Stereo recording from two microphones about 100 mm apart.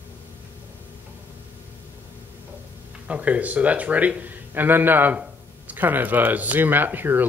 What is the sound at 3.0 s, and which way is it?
Speech, 15° right (ahead or behind).